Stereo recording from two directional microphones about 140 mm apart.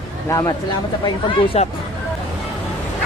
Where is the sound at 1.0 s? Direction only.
40° left (ahead or behind).